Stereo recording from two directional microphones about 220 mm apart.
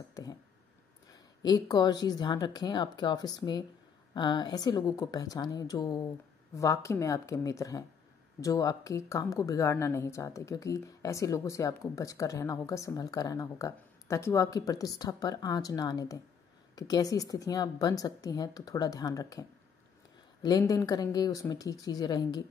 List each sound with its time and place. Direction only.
0.1 s a sound: 15° left (ahead or behind)
1.1 s a woman's voice: 20° left (ahead or behind)
20.4 s a woman's voice: 15° left (ahead or behind)